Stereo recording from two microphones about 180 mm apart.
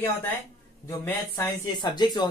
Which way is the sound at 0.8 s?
15° left (ahead or behind).